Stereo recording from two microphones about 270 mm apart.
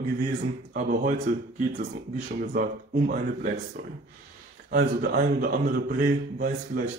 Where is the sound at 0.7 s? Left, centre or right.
Right.